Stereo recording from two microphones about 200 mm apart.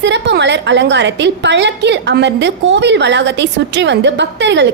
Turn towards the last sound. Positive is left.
turn(degrees=-60)  # may be behind; listen again after turning